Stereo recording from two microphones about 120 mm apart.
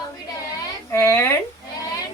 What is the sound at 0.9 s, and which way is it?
Speech, 25° left (ahead or behind).